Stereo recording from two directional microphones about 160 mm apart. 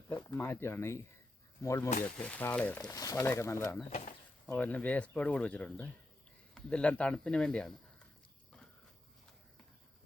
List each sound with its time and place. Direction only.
0.1 s speech: 25° left (ahead or behind)
0.3 s speech: 15° left (ahead or behind)
2.9 s speech: 20° left (ahead or behind)
3.8 s speech: 40° left (ahead or behind)
4.4 s speech: 10° left (ahead or behind)